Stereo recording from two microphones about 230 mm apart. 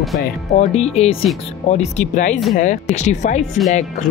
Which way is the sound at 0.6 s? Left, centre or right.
Left.